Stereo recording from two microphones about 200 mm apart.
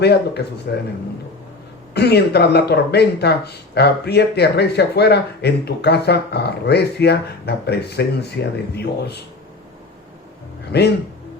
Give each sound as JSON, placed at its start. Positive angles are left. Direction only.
{"t": 0.0, "sound": "speech", "side_deg": 55}
{"t": 1.9, "sound": "speech", "side_deg": 55}
{"t": 10.7, "sound": "speech", "side_deg": 55}